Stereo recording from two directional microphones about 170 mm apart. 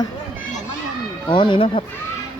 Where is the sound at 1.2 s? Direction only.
30° left (ahead or behind).